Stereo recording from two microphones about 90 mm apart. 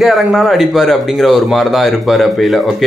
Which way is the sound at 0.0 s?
Centre (ahead or behind).